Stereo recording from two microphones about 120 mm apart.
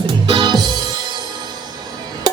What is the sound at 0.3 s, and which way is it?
Music, 40° right (ahead or behind).